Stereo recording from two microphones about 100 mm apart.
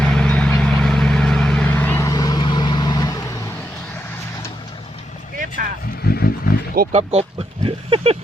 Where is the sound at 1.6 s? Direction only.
20° left (ahead or behind).